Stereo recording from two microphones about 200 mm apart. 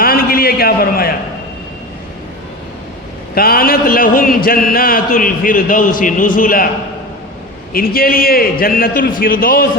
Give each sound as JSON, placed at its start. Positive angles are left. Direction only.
{"t": 0.0, "sound": "a sound", "side_deg": 45}
{"t": 3.3, "sound": "a man's voice", "side_deg": 50}
{"t": 7.7, "sound": "a man's voice", "side_deg": 45}